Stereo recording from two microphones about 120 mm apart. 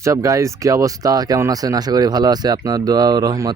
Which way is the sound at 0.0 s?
25° right (ahead or behind).